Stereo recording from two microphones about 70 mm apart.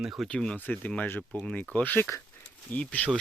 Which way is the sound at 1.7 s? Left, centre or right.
Left.